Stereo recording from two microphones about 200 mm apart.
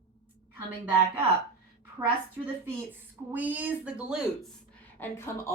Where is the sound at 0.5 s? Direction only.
10° right (ahead or behind).